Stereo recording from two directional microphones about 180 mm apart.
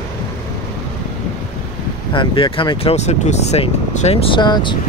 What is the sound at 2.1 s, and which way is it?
Speech, 25° left (ahead or behind).